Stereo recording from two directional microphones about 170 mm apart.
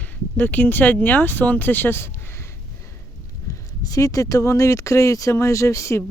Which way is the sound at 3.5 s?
20° left (ahead or behind).